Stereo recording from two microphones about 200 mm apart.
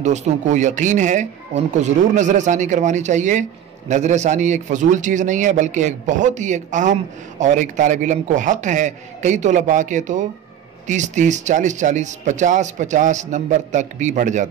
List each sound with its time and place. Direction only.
0.0 s a man's voice: 35° right (ahead or behind)